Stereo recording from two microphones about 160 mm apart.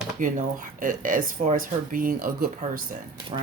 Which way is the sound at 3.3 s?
35° right (ahead or behind).